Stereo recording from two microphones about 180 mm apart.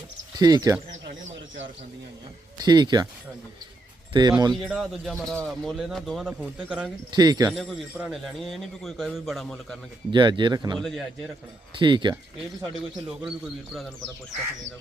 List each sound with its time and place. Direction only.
0.3 s speech: 20° right (ahead or behind)
2.6 s speech: 25° right (ahead or behind)
4.1 s speech: 25° right (ahead or behind)
4.5 s speech: centre (ahead or behind)
7.1 s speech: 20° right (ahead or behind)
7.5 s speech: centre (ahead or behind)
10.1 s speech: 25° right (ahead or behind)
10.8 s speech: centre (ahead or behind)
11.8 s speech: 25° right (ahead or behind)